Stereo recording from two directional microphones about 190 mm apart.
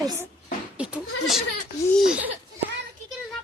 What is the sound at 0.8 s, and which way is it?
Goat, 5° right (ahead or behind).